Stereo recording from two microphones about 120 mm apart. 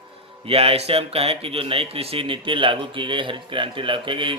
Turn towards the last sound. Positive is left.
turn(degrees=-45)  # may be behind; listen again after turning